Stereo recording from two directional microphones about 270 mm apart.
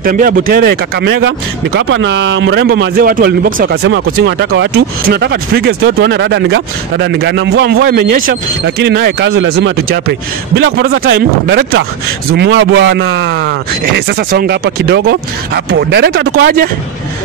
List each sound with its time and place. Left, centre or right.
0.0 s speech: right